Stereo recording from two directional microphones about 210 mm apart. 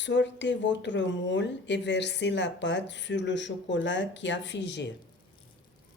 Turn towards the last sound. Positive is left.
turn(degrees=55)  # may be behind; listen again after turning